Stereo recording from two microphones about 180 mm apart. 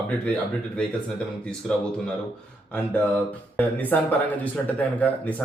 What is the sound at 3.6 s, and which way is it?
Speech, 10° left (ahead or behind).